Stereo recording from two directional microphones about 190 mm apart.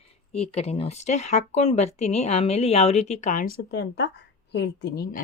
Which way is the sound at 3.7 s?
60° left (ahead or behind).